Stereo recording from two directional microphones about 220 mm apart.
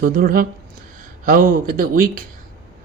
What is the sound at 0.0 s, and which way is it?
Speech, 40° right (ahead or behind).